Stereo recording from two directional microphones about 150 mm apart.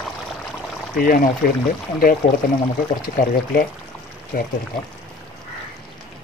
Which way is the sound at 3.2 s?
80° left.